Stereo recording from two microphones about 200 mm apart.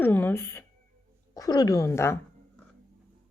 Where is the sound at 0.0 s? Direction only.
10° left (ahead or behind).